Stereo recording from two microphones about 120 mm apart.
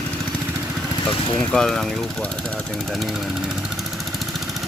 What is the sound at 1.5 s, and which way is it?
Speech, 5° left (ahead or behind).